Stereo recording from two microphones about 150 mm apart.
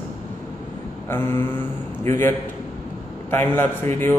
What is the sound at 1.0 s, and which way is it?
Mantra, 15° left (ahead or behind).